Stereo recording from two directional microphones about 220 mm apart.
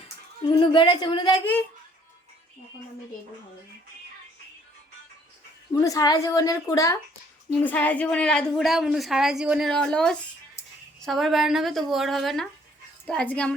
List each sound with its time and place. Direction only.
0.6 s speech: 20° left (ahead or behind)
5.7 s a woman's voice: 15° left (ahead or behind)